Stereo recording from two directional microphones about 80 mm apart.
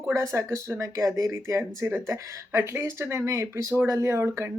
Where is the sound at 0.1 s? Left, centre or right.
Right.